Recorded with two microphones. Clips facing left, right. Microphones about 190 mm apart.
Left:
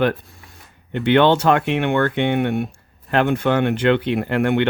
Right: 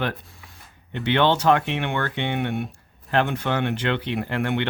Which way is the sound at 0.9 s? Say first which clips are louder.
Left 6 dB; 55° left (ahead or behind).